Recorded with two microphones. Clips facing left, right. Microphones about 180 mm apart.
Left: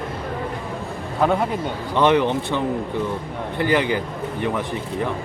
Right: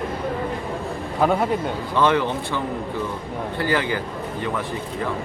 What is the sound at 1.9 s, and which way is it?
Speech, 20° left (ahead or behind).